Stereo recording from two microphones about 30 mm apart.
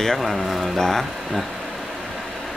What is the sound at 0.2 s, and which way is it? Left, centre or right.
Speech, centre.